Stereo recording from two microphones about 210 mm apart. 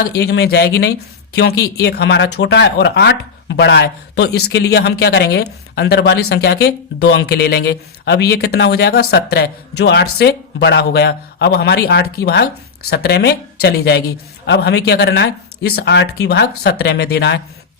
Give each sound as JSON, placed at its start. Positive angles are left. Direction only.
{"t": 0.0, "sound": "speech", "side_deg": 50}